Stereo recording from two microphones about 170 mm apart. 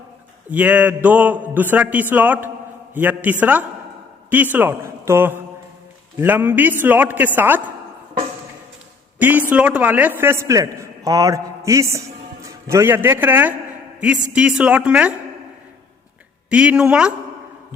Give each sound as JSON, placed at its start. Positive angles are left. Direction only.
{"t": 0.5, "sound": "a man's voice", "side_deg": -10}
{"t": 9.5, "sound": "a man's voice", "side_deg": -5}
{"t": 16.5, "sound": "a man's voice", "side_deg": -5}